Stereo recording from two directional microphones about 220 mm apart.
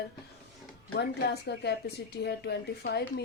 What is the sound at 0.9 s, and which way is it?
Speech, 45° left (ahead or behind).